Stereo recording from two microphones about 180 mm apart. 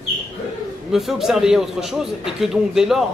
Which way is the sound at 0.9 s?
Centre (ahead or behind).